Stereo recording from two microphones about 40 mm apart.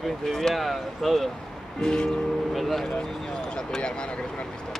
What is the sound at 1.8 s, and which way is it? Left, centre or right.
Speech, centre.